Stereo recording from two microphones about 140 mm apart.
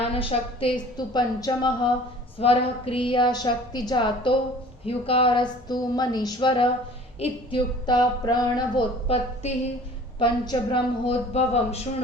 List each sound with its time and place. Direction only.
0.0 s a woman's voice: 40° left (ahead or behind)
0.9 s a woman's voice: 30° left (ahead or behind)
2.4 s a woman's voice: 45° left (ahead or behind)
9.0 s a woman's voice: 45° left (ahead or behind)
10.2 s a woman's voice: 35° left (ahead or behind)